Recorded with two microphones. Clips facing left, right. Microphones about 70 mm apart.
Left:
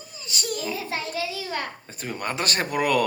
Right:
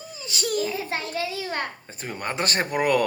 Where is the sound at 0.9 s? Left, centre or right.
Right.